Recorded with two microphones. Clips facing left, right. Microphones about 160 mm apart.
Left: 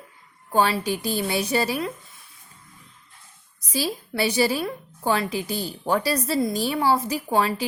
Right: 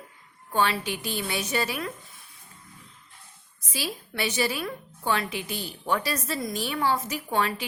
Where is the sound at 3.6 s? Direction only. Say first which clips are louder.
Left 7 dB; 40° left (ahead or behind).